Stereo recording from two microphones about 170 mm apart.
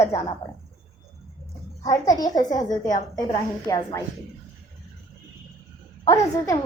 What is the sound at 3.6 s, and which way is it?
Speech, 20° left (ahead or behind).